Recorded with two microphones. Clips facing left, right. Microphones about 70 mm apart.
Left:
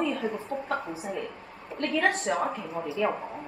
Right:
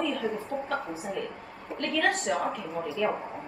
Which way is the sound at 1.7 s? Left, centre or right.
Left.